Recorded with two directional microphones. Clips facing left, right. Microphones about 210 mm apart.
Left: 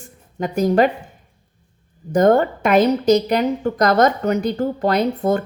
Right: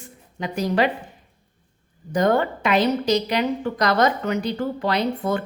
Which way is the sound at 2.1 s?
45° left (ahead or behind).